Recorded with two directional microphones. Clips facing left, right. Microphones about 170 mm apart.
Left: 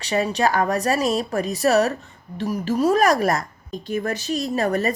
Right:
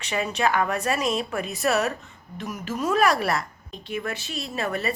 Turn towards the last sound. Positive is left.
turn(degrees=40)  # may be behind; listen again after turning